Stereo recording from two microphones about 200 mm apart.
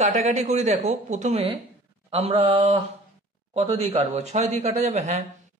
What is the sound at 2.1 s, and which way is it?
Mantra, 30° right (ahead or behind).